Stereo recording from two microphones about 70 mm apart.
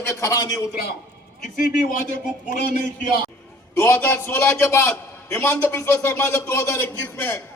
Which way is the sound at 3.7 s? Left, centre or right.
Left.